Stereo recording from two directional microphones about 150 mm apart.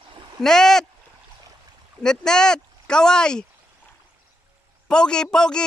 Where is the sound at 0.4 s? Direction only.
5° left (ahead or behind).